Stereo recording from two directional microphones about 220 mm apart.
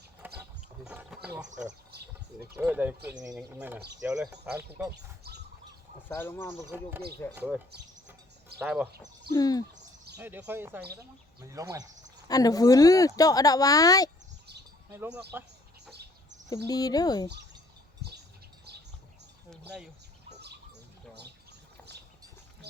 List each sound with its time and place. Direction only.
0.2 s a sound: 10° right (ahead or behind)
1.9 s speech: 45° right (ahead or behind)
2.6 s speech: 10° right (ahead or behind)
6.1 s speech: 10° left (ahead or behind)
7.3 s speech: 5° right (ahead or behind)
9.3 s speech: 15° left (ahead or behind)
10.2 s speech: 10° right (ahead or behind)
12.3 s speech: 15° left (ahead or behind)
14.9 s speech: 10° right (ahead or behind)
16.6 s speech: 15° left (ahead or behind)
19.5 s speech: 5° right (ahead or behind)